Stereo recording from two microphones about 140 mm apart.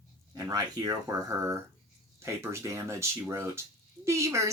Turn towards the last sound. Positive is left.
turn(degrees=-20)  # may be behind; listen again after turning